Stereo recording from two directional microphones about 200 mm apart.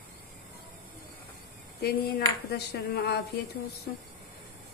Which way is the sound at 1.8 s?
55° left (ahead or behind).